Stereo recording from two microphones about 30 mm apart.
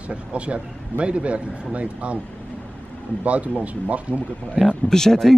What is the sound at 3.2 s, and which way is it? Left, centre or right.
Speech, right.